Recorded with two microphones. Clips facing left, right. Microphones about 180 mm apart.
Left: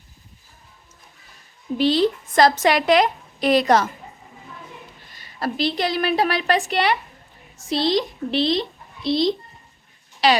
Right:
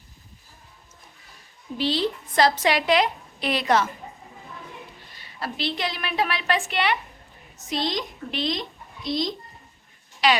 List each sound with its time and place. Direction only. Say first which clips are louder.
1.8 s a woman's voice: left 6 dB; 45° left (ahead or behind)
5.4 s a woman's voice: left 6 dB; 40° left (ahead or behind)